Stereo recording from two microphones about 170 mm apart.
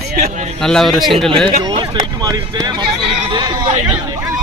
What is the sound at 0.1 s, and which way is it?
Speech, 60° right (ahead or behind).